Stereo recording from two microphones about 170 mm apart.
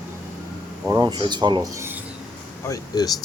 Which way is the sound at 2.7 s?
20° left (ahead or behind).